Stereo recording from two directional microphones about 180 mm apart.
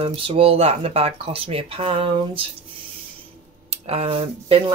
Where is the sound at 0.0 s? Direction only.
30° right (ahead or behind).